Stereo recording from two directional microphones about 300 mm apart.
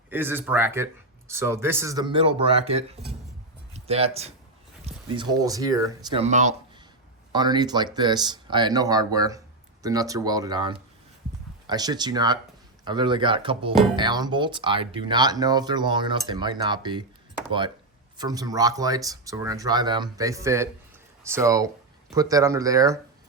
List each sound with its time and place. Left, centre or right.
0.1 s a man's voice: centre
18.2 s speech: centre